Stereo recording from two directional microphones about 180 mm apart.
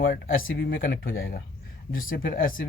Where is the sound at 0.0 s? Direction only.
60° left (ahead or behind).